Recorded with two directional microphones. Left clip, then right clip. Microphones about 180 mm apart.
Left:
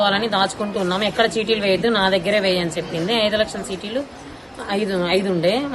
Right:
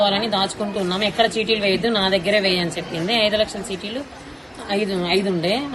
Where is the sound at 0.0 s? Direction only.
15° left (ahead or behind).